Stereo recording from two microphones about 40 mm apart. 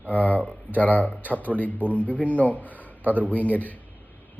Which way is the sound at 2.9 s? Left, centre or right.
Right.